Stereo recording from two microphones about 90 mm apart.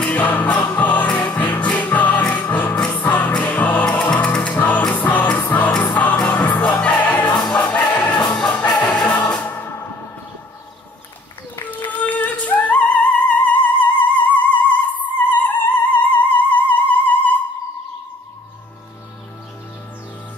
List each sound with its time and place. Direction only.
0.0 s music: 15° left (ahead or behind)
8.7 s music: 50° left (ahead or behind)
9.3 s music: 20° left (ahead or behind)
11.5 s music: 20° left (ahead or behind)